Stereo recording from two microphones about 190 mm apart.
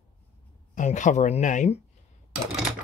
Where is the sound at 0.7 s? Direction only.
40° left (ahead or behind).